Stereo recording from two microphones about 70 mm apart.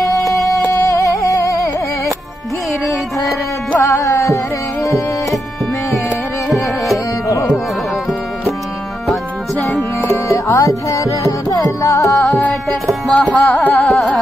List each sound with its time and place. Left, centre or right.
0.7 s a sound: left
3.8 s music: left
9.1 s music: centre
10.1 s music: left
13.1 s music: centre
13.8 s carnatic music: centre